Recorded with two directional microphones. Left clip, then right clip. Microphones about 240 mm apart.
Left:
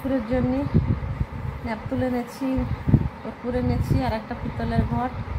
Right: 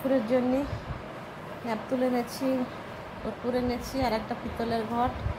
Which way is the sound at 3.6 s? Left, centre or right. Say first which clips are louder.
Left 2 dB; centre.